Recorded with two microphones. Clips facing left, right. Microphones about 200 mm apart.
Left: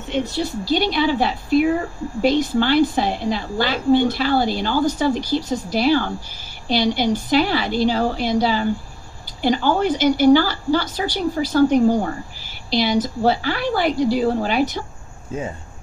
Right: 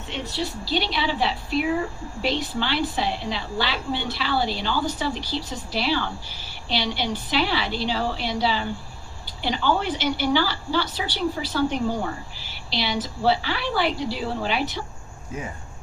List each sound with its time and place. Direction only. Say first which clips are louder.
0.1 s a woman's voice: left 7 dB; 45° left (ahead or behind)